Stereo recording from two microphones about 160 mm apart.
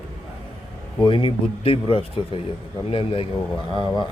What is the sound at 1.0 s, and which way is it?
A man's voice, 35° left (ahead or behind).